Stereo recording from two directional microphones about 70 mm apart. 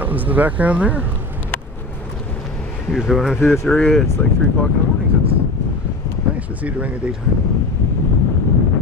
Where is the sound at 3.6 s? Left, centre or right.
Left.